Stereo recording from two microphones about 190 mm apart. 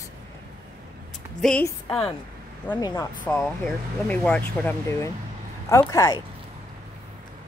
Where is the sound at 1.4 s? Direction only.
Centre (ahead or behind).